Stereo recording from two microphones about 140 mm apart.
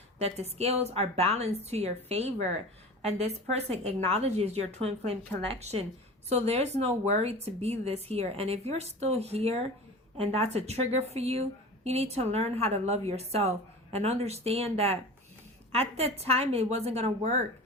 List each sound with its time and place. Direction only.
0.2 s a woman's voice: 50° right (ahead or behind)